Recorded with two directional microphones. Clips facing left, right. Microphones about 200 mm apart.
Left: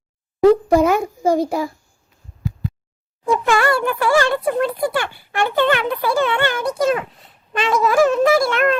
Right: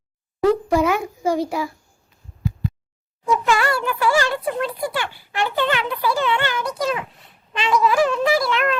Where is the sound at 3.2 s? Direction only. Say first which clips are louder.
Left 3 dB; 50° left (ahead or behind).